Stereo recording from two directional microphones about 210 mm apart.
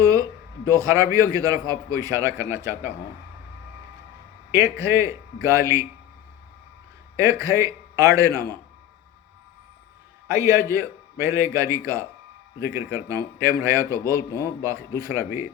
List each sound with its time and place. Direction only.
0.0 s a sound: 15° right (ahead or behind)
0.7 s a man's voice: 15° right (ahead or behind)
4.5 s a man's voice: 15° right (ahead or behind)
7.4 s a man's voice: 15° right (ahead or behind)
10.2 s a man's voice: 15° right (ahead or behind)